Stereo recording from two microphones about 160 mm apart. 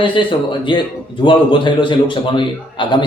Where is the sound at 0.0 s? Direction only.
30° left (ahead or behind).